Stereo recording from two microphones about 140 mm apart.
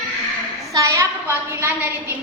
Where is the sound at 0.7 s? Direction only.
20° right (ahead or behind).